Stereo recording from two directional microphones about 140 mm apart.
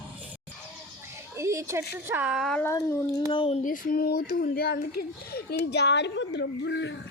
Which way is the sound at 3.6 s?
80° left.